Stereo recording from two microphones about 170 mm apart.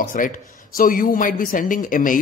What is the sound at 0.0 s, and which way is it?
A woman's voice, 50° left (ahead or behind).